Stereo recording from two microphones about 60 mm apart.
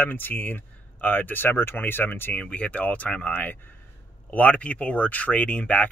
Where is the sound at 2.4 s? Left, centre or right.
Left.